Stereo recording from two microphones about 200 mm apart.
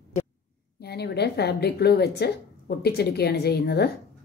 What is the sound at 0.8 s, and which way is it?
A woman's voice, 55° left (ahead or behind).